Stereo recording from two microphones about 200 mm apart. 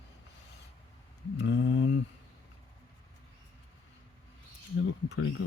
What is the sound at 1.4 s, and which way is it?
Speech, 65° left (ahead or behind).